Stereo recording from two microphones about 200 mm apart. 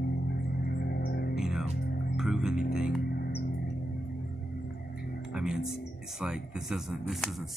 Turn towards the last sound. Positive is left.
turn(degrees=0)  # may be behind; listen again after turning